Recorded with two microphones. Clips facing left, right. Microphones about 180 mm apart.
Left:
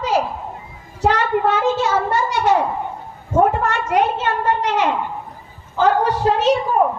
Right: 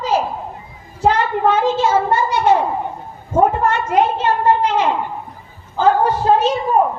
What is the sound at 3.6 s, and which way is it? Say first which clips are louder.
A child's voice: right 2 dB; 75° left (ahead or behind).